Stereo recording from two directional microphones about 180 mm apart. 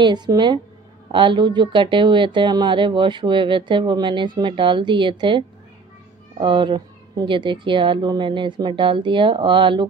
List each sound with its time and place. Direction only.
0.0 s speech: 25° right (ahead or behind)
6.4 s speech: 25° right (ahead or behind)